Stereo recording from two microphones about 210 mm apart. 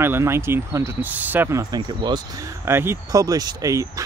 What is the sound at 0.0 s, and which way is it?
Speech, 10° right (ahead or behind).